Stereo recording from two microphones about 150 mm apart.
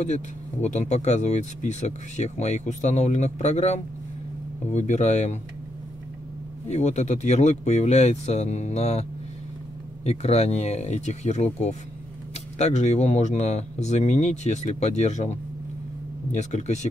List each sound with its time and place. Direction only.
0.0 s speech: 50° left (ahead or behind)
6.7 s speech: 50° left (ahead or behind)
10.0 s speech: 45° left (ahead or behind)